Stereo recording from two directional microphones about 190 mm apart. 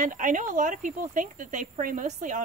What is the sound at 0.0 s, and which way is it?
Speech, 45° right (ahead or behind).